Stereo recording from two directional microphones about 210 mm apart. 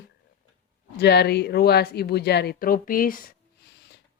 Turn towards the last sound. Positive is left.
turn(degrees=45)  # may be behind; listen again after turning